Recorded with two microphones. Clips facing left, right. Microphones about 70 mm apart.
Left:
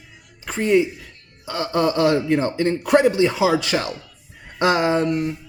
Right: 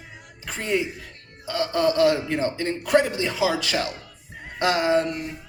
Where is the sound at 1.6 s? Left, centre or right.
Left.